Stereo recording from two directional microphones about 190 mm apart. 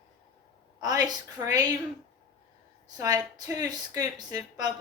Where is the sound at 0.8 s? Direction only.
20° right (ahead or behind).